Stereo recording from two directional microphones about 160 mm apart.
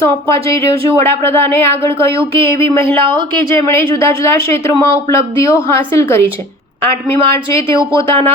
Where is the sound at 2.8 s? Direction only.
30° right (ahead or behind).